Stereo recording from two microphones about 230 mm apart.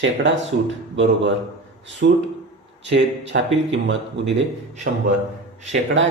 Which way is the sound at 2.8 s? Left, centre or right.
Right.